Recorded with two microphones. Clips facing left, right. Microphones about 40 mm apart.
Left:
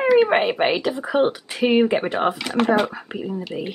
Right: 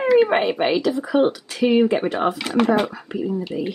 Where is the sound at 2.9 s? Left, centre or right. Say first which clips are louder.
Right 3 dB; centre.